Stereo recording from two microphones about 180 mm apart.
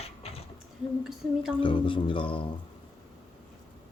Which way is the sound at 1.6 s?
30° left (ahead or behind).